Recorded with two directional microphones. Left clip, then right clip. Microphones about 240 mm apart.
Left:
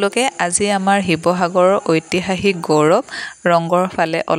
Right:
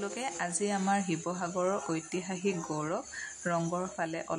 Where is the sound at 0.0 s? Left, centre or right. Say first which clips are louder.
Left 18 dB; left.